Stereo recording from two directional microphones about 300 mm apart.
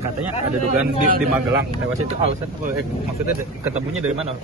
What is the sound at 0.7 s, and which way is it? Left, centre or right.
Speech, right.